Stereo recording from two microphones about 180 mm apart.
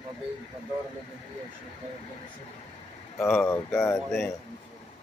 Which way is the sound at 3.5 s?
15° left (ahead or behind).